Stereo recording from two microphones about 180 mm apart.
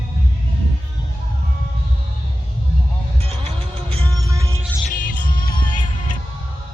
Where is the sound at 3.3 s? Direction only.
35° right (ahead or behind).